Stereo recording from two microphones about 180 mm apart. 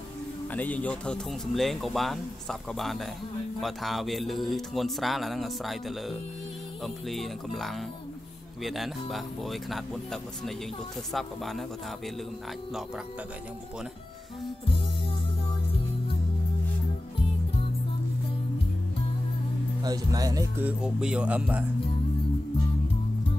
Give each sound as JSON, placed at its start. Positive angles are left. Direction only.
{"t": 0.5, "sound": "speech", "side_deg": 10}
{"t": 11.1, "sound": "speech", "side_deg": 0}
{"t": 19.8, "sound": "speech", "side_deg": -20}
{"t": 20.6, "sound": "speech", "side_deg": -5}